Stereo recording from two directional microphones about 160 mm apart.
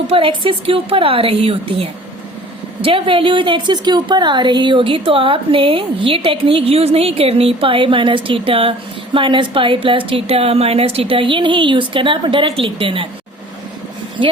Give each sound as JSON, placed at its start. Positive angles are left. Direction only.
{"t": 0.1, "sound": "a woman's voice", "side_deg": -35}